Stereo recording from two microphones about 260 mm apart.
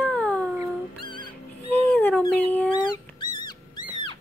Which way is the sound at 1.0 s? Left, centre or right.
Centre.